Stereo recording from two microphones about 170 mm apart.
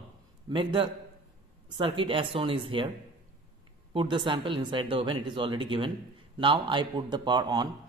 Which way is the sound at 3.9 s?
30° right (ahead or behind).